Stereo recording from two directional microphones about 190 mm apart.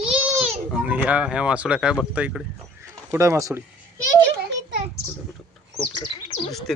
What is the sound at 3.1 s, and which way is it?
Speech, 15° right (ahead or behind).